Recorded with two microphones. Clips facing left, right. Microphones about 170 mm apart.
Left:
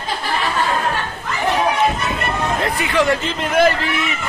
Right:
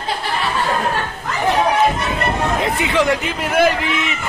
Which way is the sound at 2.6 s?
20° right (ahead or behind).